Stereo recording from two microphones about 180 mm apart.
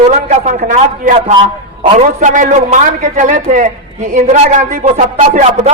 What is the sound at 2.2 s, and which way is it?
A man's voice, 45° right (ahead or behind).